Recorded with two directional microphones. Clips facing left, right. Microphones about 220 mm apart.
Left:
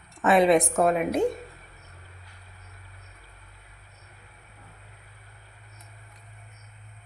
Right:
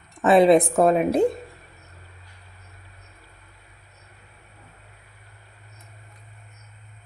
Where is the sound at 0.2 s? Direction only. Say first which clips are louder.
Right 4 dB; 35° right (ahead or behind).